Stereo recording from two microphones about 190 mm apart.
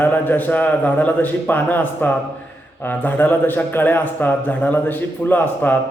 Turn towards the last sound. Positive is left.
turn(degrees=10)  # may be behind; listen again after turning